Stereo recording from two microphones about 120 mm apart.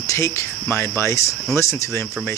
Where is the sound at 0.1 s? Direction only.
25° left (ahead or behind).